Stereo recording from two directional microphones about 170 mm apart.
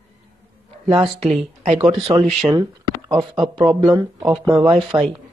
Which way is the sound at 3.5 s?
25° right (ahead or behind).